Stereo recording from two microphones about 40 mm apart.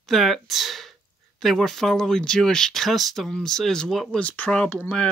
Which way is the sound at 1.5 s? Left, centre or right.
Centre.